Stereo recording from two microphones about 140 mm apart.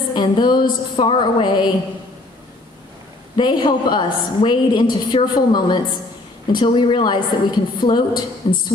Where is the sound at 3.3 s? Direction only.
30° left (ahead or behind).